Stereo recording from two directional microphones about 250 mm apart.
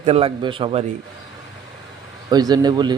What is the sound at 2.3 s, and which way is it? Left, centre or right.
Speech, centre.